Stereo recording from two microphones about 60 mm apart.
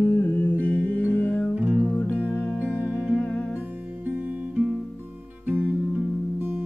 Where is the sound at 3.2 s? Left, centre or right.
Centre.